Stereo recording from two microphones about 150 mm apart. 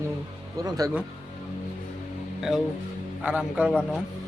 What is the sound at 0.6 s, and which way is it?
Speech, 25° right (ahead or behind).